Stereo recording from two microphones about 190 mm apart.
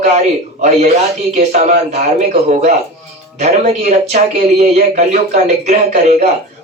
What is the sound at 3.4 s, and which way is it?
Speech, 35° right (ahead or behind).